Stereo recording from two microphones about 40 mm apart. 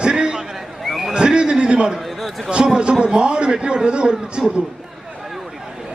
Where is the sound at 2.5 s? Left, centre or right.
Right.